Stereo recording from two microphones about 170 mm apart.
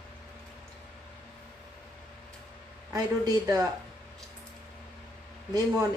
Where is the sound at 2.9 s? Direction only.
20° right (ahead or behind).